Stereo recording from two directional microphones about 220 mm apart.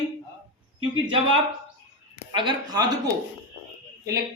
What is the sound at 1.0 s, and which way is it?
Speech, 25° right (ahead or behind).